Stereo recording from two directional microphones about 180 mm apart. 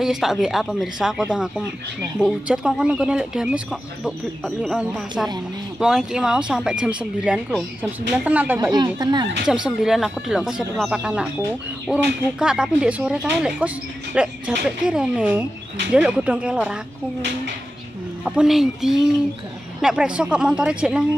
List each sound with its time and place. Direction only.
0.0 s speech: centre (ahead or behind)
8.7 s speech: 20° right (ahead or behind)
9.5 s speech: centre (ahead or behind)
18.2 s speech: 5° right (ahead or behind)